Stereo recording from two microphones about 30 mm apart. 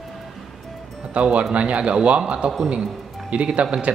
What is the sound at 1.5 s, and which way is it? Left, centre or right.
Speech, right.